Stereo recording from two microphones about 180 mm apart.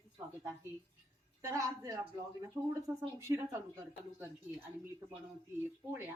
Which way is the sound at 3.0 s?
15° right (ahead or behind).